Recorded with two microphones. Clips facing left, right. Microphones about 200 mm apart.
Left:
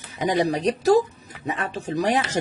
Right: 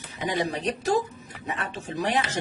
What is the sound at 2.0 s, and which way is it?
Speech, 45° left (ahead or behind).